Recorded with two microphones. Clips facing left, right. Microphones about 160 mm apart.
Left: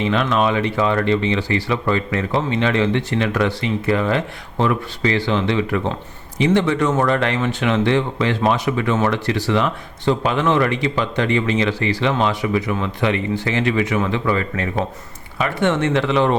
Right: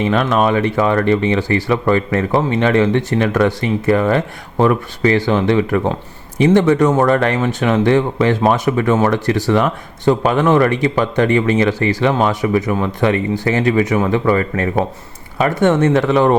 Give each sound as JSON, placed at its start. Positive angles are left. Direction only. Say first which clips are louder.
{"t": 0.1, "sound": "speech", "louder": "right 3 dB", "side_deg": -45}